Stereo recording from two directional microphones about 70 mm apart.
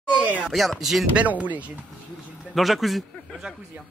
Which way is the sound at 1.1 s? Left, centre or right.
Right.